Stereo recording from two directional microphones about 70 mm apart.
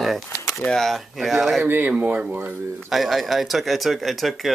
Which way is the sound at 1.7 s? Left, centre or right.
Right.